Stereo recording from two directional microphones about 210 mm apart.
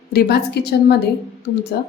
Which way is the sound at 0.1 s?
50° left (ahead or behind).